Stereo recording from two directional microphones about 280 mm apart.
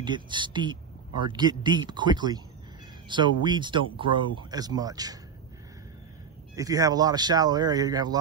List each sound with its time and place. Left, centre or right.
0.0 s speech: centre
6.5 s speech: centre